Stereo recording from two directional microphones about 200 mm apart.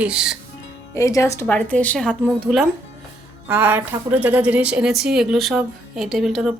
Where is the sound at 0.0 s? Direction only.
5° right (ahead or behind).